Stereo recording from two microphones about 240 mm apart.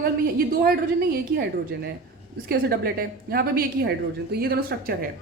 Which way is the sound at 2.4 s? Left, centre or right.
Right.